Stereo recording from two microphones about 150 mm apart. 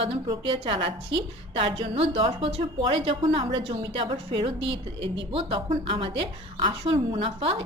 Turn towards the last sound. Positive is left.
turn(degrees=-35)  # may be behind; listen again after turning